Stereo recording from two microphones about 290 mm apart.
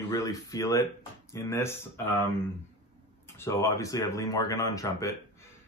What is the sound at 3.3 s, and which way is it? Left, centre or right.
Speech, centre.